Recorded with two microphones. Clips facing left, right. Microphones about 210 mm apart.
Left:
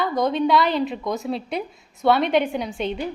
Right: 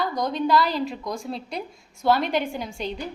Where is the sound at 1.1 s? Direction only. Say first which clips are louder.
Left 5 dB; 5° left (ahead or behind).